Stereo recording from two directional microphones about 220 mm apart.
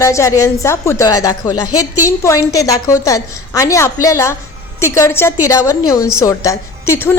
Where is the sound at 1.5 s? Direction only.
90° left.